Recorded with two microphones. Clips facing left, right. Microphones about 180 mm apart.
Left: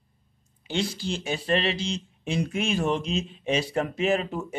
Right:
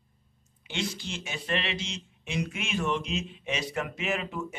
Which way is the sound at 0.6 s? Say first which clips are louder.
Left 6 dB; 35° left (ahead or behind).